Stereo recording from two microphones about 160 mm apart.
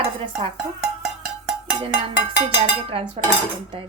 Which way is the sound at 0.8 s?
Centre (ahead or behind).